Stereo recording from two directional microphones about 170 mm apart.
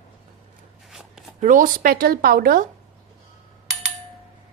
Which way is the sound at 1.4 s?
50° right (ahead or behind).